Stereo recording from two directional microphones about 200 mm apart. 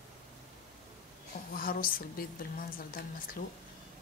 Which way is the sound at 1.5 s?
45° left (ahead or behind).